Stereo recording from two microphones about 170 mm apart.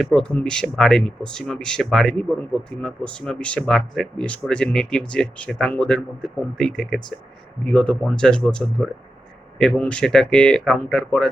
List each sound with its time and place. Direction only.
0.0 s speech: 5° left (ahead or behind)